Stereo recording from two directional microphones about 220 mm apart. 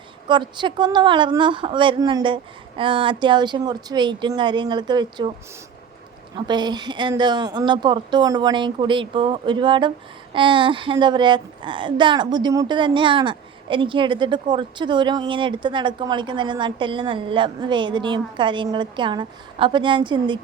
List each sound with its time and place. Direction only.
0.3 s speech: 20° right (ahead or behind)
6.3 s speech: 20° right (ahead or behind)